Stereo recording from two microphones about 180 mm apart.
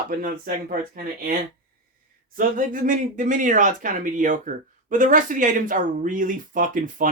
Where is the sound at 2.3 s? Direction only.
50° right (ahead or behind).